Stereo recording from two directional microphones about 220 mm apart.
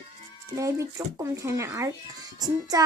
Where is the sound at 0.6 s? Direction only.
15° right (ahead or behind).